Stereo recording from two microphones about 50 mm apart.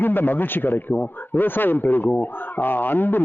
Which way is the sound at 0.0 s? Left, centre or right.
Left.